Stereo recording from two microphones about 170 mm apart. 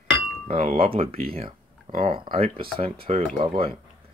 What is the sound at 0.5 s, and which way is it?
Speech, 35° right (ahead or behind).